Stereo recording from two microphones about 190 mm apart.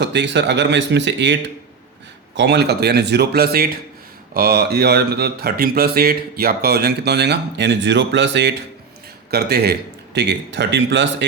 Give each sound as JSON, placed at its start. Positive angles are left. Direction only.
{"t": 0.0, "sound": "speech", "side_deg": -65}
{"t": 9.3, "sound": "speech", "side_deg": -55}